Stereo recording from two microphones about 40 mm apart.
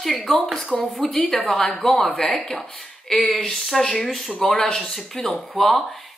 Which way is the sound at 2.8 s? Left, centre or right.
Centre.